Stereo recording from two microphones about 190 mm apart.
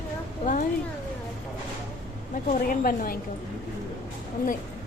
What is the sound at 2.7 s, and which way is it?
Speech, 50° left (ahead or behind).